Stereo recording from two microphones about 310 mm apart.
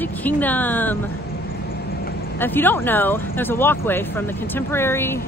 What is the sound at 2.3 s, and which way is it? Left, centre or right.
Speech, centre.